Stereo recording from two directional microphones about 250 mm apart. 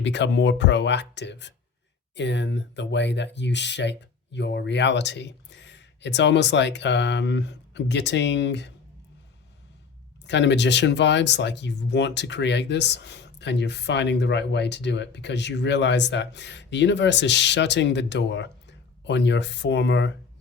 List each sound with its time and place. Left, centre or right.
0.0 s speech: left
10.2 s speech: left